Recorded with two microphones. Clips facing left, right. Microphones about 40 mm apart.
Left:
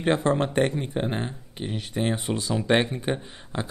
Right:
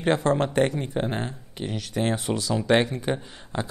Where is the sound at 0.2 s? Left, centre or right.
Centre.